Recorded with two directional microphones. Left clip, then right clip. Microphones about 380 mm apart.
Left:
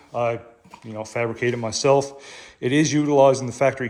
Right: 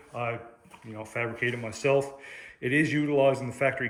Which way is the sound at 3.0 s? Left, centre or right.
Centre.